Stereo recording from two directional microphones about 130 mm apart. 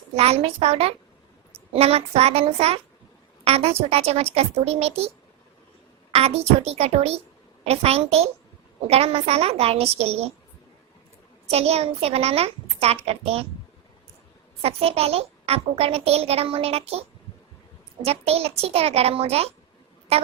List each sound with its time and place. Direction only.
0.2 s a child's voice: 50° right (ahead or behind)
6.1 s a child's voice: 50° right (ahead or behind)
11.5 s a child's voice: 50° right (ahead or behind)
14.6 s a child's voice: 50° right (ahead or behind)